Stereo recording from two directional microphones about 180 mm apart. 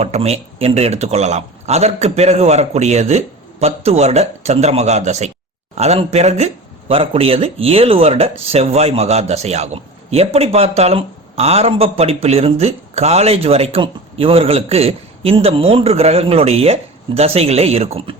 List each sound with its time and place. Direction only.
0.0 s speech: 35° right (ahead or behind)